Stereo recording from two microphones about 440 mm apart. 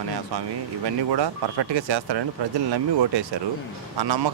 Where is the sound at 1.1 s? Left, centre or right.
Right.